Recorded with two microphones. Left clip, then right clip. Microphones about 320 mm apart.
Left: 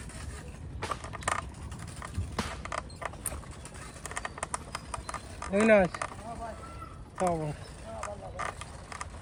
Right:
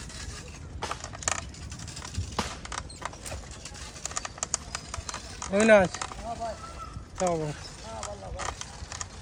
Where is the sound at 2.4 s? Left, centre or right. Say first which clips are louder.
Right 3 dB; centre.